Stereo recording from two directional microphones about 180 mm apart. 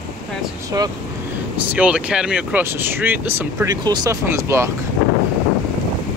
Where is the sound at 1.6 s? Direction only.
10° right (ahead or behind).